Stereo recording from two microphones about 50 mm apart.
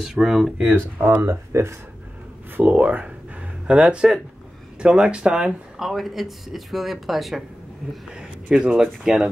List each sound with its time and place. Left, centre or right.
0.0 s speech: centre
0.7 s speech: right
1.2 s speech: right
2.5 s a sound: right
4.7 s speech: centre
5.8 s speech: centre
8.5 s speech: centre